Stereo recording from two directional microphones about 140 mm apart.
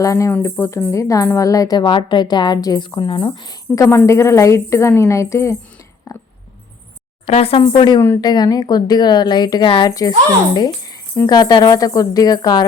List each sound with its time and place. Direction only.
0.0 s a woman's voice: 20° left (ahead or behind)
3.8 s a woman's voice: 20° left (ahead or behind)
6.1 s a sound: 25° left (ahead or behind)
7.3 s a woman's voice: 45° left (ahead or behind)
10.5 s tambourine: 25° left (ahead or behind)
11.3 s a woman's voice: 25° left (ahead or behind)